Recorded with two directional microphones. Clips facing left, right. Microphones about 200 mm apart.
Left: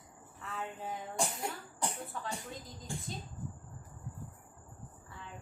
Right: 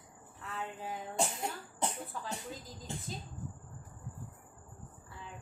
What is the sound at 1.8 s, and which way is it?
Speech, 20° right (ahead or behind).